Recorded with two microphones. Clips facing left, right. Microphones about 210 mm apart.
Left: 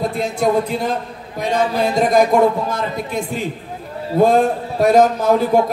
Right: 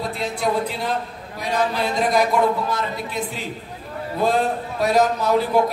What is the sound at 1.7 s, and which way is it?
A man's voice, 45° left (ahead or behind).